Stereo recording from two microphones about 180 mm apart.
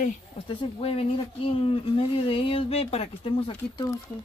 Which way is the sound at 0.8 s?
30° left (ahead or behind).